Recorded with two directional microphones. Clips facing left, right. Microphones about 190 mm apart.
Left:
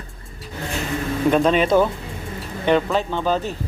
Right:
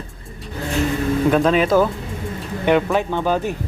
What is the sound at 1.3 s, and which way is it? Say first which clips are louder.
Speech: even; centre (ahead or behind).